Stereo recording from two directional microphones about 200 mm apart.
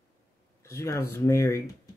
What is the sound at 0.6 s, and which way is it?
Speech, 15° left (ahead or behind).